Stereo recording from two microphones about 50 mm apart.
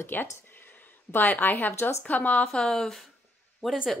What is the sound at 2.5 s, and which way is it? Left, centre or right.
Speech, centre.